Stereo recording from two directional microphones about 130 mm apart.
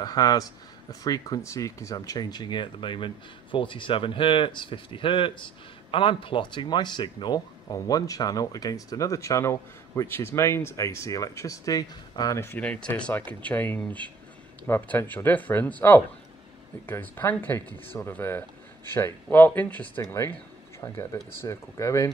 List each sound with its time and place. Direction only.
0.0 s speech: 30° left (ahead or behind)